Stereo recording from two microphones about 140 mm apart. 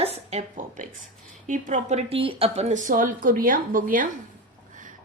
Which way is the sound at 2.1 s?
40° right (ahead or behind).